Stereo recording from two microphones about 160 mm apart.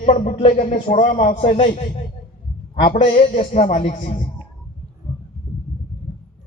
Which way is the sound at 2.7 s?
55° left (ahead or behind).